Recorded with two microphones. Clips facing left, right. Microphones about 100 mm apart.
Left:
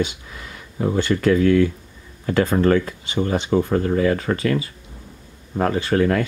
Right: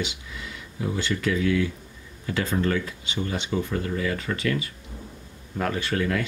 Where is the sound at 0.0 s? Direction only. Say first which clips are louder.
Left 7 dB; 45° left (ahead or behind).